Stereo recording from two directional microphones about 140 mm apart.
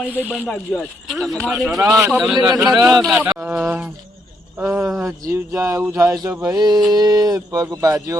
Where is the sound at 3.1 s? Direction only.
10° right (ahead or behind).